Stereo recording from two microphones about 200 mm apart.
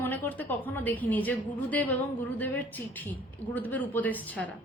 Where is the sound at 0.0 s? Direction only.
10° left (ahead or behind).